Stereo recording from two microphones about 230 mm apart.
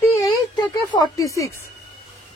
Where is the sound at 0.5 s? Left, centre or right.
Centre.